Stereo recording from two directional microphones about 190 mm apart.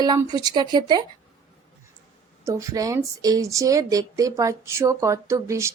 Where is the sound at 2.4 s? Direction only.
15° right (ahead or behind).